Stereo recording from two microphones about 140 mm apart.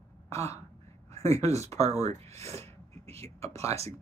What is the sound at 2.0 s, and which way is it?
Speech, 50° right (ahead or behind).